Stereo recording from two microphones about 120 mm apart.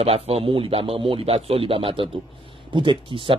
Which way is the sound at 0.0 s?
55° right (ahead or behind).